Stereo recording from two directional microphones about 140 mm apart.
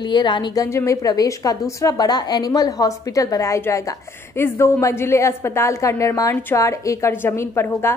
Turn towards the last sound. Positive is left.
turn(degrees=20)  # may be behind; listen again after turning